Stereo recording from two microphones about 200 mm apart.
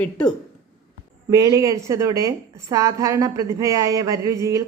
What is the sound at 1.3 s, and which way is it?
A woman's voice, 15° right (ahead or behind).